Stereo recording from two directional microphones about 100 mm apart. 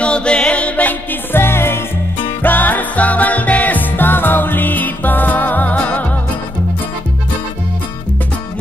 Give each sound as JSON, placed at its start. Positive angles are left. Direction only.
{"t": 0.0, "sound": "music", "side_deg": 10}